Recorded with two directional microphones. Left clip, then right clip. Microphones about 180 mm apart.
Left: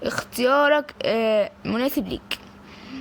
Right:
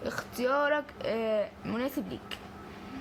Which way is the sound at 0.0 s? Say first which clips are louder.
Left 9 dB; 40° left (ahead or behind).